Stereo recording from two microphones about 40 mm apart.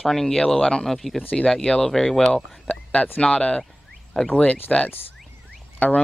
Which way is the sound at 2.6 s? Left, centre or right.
Left.